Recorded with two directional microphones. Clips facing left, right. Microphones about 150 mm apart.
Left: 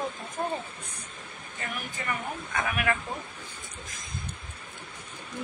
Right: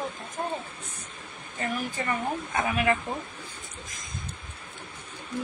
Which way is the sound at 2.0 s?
35° right (ahead or behind).